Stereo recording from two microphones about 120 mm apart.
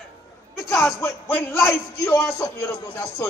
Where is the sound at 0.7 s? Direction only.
15° left (ahead or behind).